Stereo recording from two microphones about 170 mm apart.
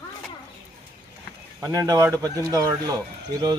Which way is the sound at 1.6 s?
20° right (ahead or behind).